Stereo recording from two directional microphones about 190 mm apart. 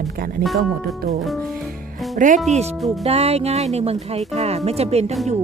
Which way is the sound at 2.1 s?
40° right (ahead or behind).